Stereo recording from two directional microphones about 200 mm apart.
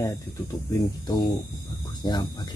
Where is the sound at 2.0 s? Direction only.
20° left (ahead or behind).